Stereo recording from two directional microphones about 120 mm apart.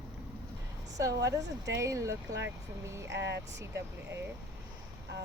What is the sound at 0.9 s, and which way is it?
Speech, 30° right (ahead or behind).